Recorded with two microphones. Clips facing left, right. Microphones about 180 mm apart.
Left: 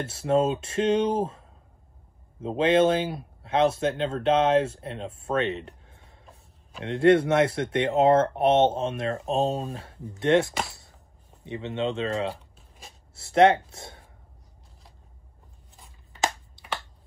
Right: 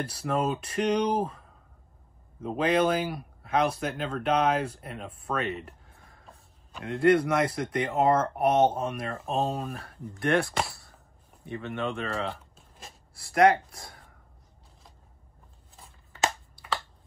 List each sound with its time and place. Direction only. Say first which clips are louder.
0.0 s speech: left 5 dB; 25° left (ahead or behind)
2.4 s speech: left 4 dB; 25° left (ahead or behind)
10.7 s a sound: right 1 dB; 20° left (ahead or behind)
11.4 s speech: left 3 dB; 20° left (ahead or behind)
12.5 s a sound: right 1 dB; centre (ahead or behind)
13.1 s speech: left 2 dB; 25° left (ahead or behind)